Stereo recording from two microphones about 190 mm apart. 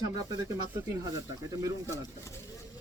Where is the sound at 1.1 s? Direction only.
15° right (ahead or behind).